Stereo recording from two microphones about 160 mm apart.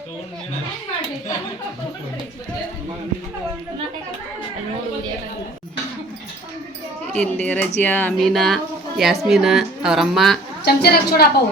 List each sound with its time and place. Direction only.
7.1 s a woman's voice: 10° left (ahead or behind)
10.7 s a woman's voice: 75° left (ahead or behind)